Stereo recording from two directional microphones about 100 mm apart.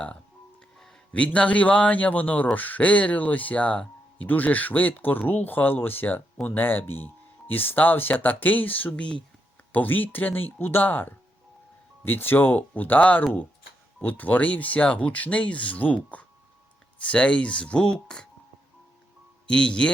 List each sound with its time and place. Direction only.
1.1 s speech: 10° left (ahead or behind)
19.5 s speech: 10° left (ahead or behind)